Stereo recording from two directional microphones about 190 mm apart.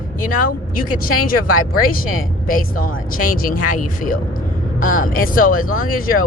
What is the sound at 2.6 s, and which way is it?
Speech, 50° left (ahead or behind).